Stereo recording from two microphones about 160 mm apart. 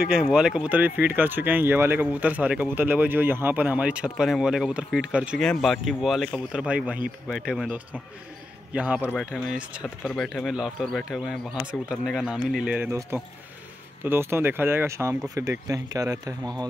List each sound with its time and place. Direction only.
0.0 s speech: 5° right (ahead or behind); by 16.6 s 25° right (ahead or behind)